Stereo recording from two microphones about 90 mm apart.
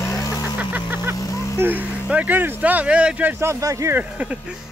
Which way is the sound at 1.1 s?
25° right (ahead or behind).